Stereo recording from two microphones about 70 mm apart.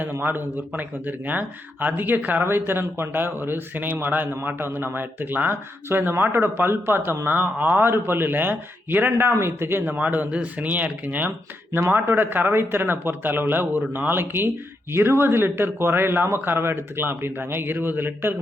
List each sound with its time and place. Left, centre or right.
0.0 s a man's voice: right
9.8 s a man's voice: centre